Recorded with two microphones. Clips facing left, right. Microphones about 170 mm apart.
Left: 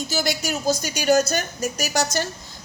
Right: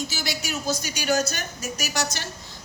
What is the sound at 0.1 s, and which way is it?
A woman's voice, 40° left (ahead or behind).